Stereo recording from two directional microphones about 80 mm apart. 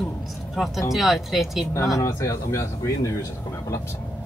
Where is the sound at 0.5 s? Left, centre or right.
Centre.